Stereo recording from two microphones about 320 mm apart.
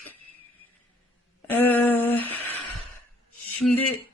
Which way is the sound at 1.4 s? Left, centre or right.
Centre.